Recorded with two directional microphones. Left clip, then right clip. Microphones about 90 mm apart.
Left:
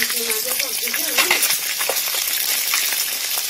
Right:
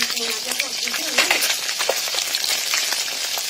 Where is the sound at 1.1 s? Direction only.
55° right (ahead or behind).